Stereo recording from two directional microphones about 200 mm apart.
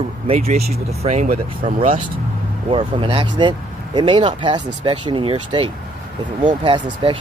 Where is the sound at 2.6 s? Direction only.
25° right (ahead or behind).